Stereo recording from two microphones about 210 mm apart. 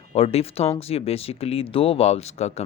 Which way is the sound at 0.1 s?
30° left (ahead or behind).